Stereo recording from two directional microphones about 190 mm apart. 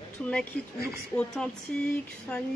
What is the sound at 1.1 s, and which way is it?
Speech, 5° left (ahead or behind).